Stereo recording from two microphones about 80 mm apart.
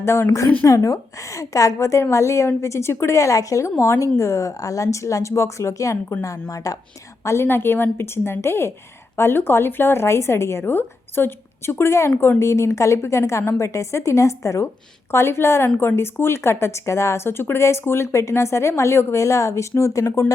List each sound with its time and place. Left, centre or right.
0.0 s a woman's voice: left
7.3 s speech: left